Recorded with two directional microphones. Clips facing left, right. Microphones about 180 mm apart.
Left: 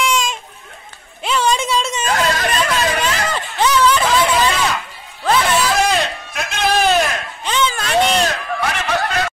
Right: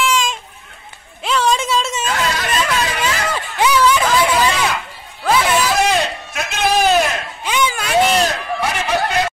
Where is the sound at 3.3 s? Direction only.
10° right (ahead or behind).